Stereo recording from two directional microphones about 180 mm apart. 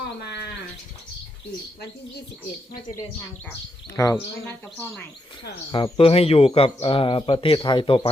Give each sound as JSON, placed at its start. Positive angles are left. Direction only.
{"t": 3.9, "sound": "speech", "side_deg": 15}
{"t": 5.7, "sound": "a man's voice", "side_deg": 30}